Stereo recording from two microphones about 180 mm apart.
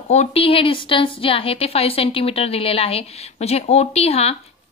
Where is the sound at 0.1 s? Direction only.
35° left (ahead or behind).